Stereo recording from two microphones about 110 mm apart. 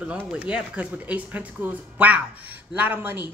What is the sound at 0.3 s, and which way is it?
Speech, 10° right (ahead or behind).